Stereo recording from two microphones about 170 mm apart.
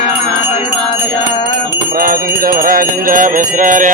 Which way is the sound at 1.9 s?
60° right (ahead or behind).